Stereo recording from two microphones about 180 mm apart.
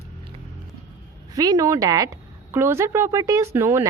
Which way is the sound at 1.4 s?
20° right (ahead or behind).